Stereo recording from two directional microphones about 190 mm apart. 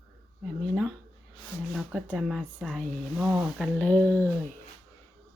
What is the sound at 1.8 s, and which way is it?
Speech, centre (ahead or behind).